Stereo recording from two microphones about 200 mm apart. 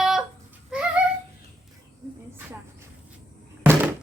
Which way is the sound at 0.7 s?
5° right (ahead or behind).